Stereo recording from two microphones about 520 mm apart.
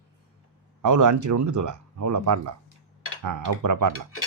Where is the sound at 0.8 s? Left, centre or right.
Right.